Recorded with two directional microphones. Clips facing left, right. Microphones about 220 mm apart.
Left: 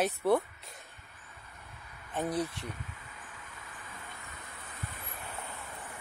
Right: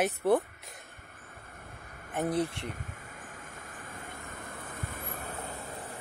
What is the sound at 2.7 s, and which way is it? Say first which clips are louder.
Vehicle: right 3 dB; 45° right (ahead or behind).